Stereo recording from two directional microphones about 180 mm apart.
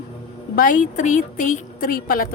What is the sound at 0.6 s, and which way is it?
A woman's voice, 45° left (ahead or behind).